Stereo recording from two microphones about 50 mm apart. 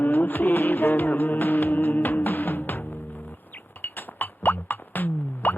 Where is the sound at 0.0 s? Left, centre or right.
Left.